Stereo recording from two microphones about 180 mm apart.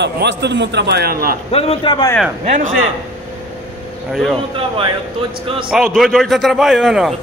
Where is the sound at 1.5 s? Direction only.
35° left (ahead or behind).